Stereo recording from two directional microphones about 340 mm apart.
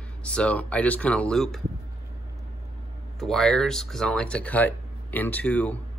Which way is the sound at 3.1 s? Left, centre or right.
Centre.